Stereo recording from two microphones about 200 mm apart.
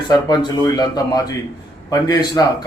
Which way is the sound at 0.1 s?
20° left (ahead or behind).